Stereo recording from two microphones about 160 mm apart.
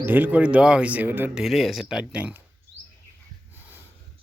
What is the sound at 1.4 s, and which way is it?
Speech, centre (ahead or behind).